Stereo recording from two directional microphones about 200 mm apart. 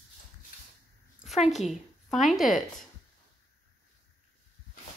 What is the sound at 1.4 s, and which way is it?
Speech, 35° left (ahead or behind).